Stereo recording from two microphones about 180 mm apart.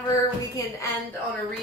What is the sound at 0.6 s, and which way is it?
Speech, 20° left (ahead or behind).